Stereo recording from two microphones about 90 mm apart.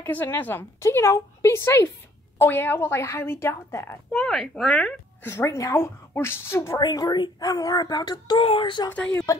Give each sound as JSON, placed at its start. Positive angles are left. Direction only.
{"t": 0.0, "sound": "a woman's voice", "side_deg": 20}
{"t": 4.1, "sound": "a woman's voice", "side_deg": 5}
{"t": 5.2, "sound": "a woman's voice", "side_deg": 30}
{"t": 6.8, "sound": "speech", "side_deg": 45}
{"t": 8.4, "sound": "speech", "side_deg": 75}
{"t": 8.9, "sound": "a woman's voice", "side_deg": 15}